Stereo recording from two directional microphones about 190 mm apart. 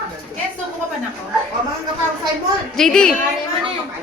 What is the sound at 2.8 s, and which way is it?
Speech, 5° left (ahead or behind).